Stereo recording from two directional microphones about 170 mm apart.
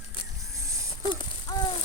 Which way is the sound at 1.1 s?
25° left (ahead or behind).